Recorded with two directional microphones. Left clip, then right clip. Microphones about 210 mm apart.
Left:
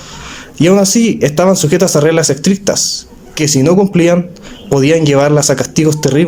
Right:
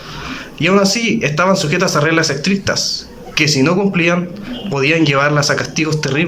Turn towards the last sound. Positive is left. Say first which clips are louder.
# left 5 dB
turn(degrees=30)  # may be behind; listen again after turning